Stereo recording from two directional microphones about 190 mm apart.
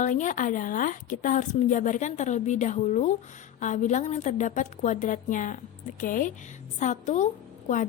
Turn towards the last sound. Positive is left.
turn(degrees=40)  # may be behind; listen again after turning